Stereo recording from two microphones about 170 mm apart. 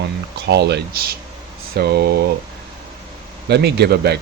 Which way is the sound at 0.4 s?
80° right.